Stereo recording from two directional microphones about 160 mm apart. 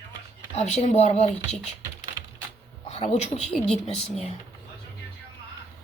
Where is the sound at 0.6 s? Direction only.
45° left (ahead or behind).